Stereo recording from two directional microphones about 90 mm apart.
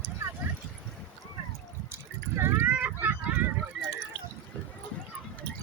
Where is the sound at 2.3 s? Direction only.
25° right (ahead or behind).